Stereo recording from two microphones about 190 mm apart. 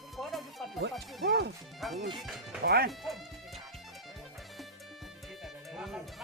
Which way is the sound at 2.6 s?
55° right (ahead or behind).